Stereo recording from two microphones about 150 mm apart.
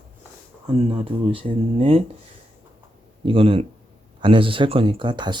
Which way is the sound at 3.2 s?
35° right (ahead or behind).